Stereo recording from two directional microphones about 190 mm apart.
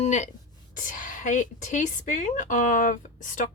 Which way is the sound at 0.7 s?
45° left (ahead or behind).